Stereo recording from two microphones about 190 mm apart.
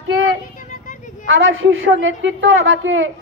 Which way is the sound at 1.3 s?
85° right.